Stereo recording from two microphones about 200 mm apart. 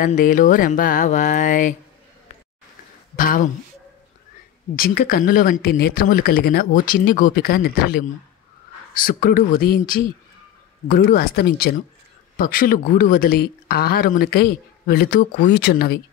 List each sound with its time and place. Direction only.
0.0 s speech: 40° left (ahead or behind)
3.2 s speech: 40° left (ahead or behind)
4.7 s speech: 45° left (ahead or behind)